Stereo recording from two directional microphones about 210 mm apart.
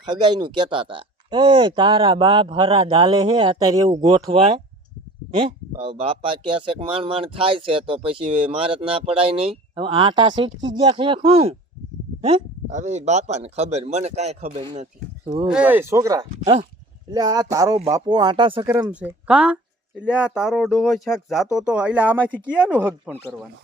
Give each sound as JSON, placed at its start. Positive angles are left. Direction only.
{"t": 0.0, "sound": "speech", "side_deg": -20}
{"t": 5.3, "sound": "speech", "side_deg": -25}
{"t": 15.5, "sound": "speech", "side_deg": -10}
{"t": 16.4, "sound": "speech", "side_deg": -35}
{"t": 17.1, "sound": "speech", "side_deg": -20}
{"t": 18.6, "sound": "speech", "side_deg": -15}